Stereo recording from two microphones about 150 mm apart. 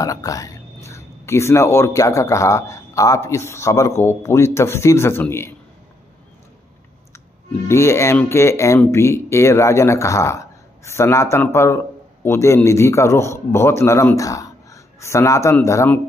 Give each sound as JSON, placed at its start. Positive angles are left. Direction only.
{"t": 0.0, "sound": "speech", "side_deg": 25}
{"t": 7.6, "sound": "speech", "side_deg": 20}